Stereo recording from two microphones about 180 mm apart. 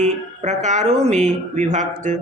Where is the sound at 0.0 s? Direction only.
40° right (ahead or behind).